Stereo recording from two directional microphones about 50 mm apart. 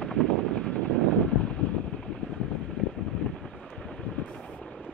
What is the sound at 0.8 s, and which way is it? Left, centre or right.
Vehicle, left.